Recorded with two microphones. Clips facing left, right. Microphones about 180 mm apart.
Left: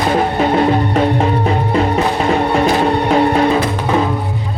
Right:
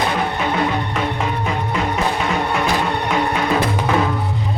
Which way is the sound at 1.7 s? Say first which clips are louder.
Left 5 dB; 35° left (ahead or behind).